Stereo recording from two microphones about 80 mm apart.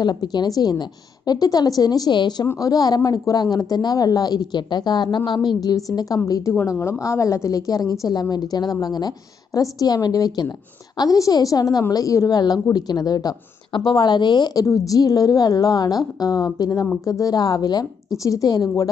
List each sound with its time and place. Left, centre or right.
0.0 s speech: left
2.6 s a woman's voice: left
18.1 s a woman's voice: left